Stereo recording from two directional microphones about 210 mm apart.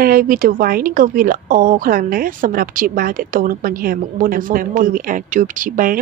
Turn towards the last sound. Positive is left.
turn(degrees=-40)  # may be behind; listen again after turning